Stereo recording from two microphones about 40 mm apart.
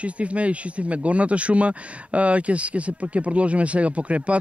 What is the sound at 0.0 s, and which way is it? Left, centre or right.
Speech, right.